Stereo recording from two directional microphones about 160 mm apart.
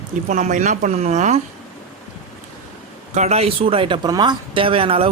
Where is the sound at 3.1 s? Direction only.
45° right (ahead or behind).